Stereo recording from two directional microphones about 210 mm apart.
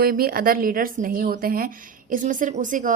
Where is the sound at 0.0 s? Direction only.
45° right (ahead or behind).